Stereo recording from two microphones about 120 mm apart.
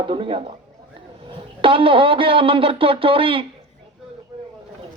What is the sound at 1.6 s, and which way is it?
Speech, 45° right (ahead or behind).